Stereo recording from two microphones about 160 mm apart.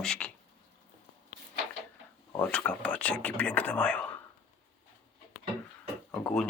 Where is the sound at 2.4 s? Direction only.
10° left (ahead or behind).